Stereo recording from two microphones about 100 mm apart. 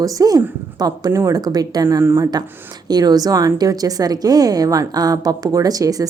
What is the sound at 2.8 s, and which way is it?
A woman's voice, 40° right (ahead or behind).